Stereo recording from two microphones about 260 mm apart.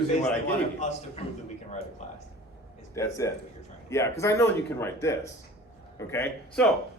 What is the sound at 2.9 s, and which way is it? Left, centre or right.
A man's voice, centre.